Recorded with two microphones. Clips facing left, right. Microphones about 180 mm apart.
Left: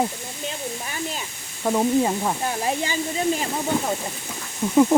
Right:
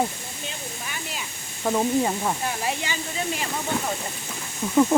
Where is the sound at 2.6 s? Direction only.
40° left (ahead or behind).